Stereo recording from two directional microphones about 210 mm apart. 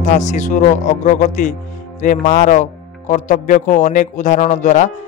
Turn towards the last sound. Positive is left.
turn(degrees=35)  # may be behind; listen again after turning